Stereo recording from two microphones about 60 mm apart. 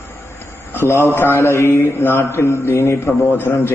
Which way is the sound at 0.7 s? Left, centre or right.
Left.